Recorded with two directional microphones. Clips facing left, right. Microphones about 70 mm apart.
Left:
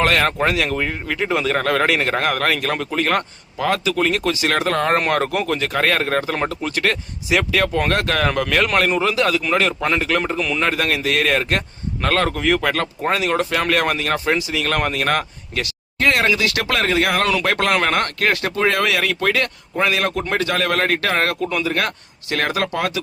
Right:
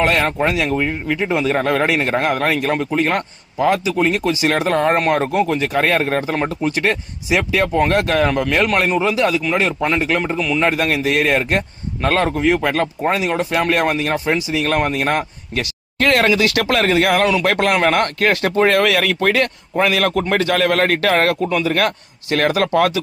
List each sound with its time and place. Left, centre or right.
0.0 s a man's voice: centre
4.5 s speech: right
5.1 s a man's voice: centre
10.3 s a man's voice: centre
10.6 s a man's voice: right
14.5 s speech: right
16.0 s a man's voice: right